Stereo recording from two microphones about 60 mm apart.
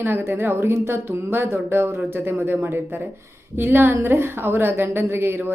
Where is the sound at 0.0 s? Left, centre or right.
Right.